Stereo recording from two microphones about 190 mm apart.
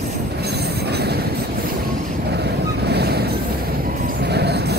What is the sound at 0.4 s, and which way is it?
Train, 60° right (ahead or behind).